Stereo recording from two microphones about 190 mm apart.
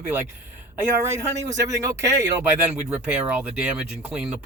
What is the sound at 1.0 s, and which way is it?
Speech, 15° right (ahead or behind).